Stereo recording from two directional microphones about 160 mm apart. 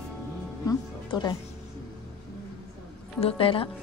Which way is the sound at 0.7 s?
25° left (ahead or behind).